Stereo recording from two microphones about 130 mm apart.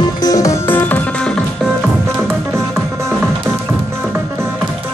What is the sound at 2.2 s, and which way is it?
Music, 20° right (ahead or behind).